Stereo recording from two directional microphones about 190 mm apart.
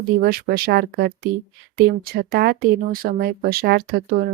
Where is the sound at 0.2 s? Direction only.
55° right (ahead or behind).